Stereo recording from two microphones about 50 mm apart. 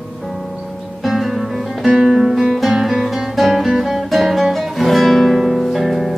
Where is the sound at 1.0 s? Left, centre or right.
Centre.